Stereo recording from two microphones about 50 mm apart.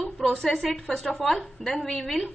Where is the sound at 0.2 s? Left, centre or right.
Centre.